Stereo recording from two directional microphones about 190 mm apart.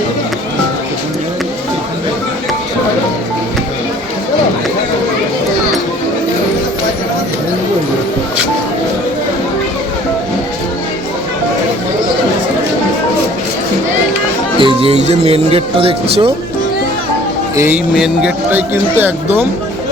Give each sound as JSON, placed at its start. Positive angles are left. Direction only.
{"t": 14.6, "sound": "speech", "side_deg": -30}
{"t": 17.9, "sound": "speech", "side_deg": -5}